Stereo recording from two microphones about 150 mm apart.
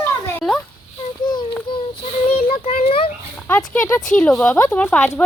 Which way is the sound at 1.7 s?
30° left (ahead or behind).